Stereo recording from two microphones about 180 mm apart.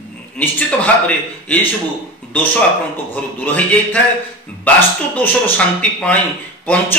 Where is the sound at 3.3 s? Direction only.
10° left (ahead or behind).